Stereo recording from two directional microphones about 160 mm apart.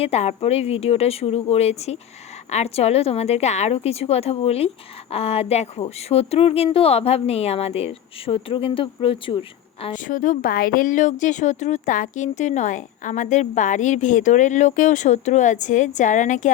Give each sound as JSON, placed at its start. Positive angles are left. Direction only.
{"t": 0.0, "sound": "a woman's voice", "side_deg": 40}
{"t": 9.9, "sound": "speech", "side_deg": 55}